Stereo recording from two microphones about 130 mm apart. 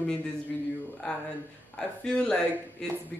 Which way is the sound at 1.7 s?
5° left (ahead or behind).